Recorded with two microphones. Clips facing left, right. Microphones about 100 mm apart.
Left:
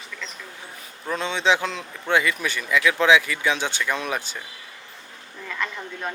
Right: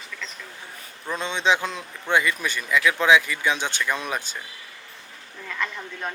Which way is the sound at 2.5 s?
15° right (ahead or behind).